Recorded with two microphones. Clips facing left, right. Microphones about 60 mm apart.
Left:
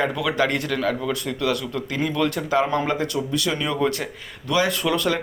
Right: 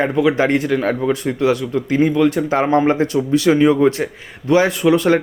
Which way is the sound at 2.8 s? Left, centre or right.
Right.